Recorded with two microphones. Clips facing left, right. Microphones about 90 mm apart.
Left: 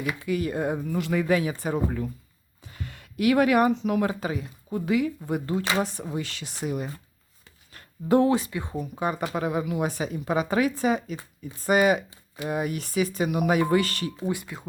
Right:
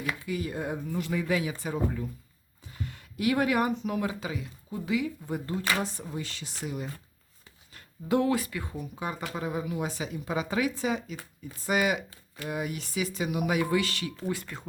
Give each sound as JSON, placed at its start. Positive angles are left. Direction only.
{"t": 0.2, "sound": "speech", "side_deg": 65}
{"t": 0.9, "sound": "speech", "side_deg": 75}
{"t": 2.6, "sound": "speech", "side_deg": 65}
{"t": 4.1, "sound": "speech", "side_deg": 50}
{"t": 5.8, "sound": "speech", "side_deg": 70}
{"t": 7.7, "sound": "a sound", "side_deg": 50}
{"t": 8.1, "sound": "speech", "side_deg": 30}
{"t": 8.8, "sound": "speech", "side_deg": 55}
{"t": 9.3, "sound": "speech", "side_deg": 70}
{"t": 14.2, "sound": "speech", "side_deg": 15}